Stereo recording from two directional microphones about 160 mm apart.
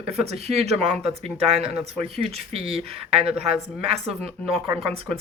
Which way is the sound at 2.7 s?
35° right (ahead or behind).